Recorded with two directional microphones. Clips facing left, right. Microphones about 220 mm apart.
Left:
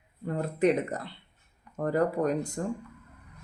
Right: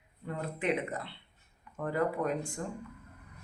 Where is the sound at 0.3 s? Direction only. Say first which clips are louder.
Left 7 dB; 40° left (ahead or behind).